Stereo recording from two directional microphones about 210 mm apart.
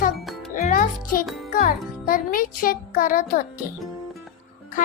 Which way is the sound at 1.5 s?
45° left (ahead or behind).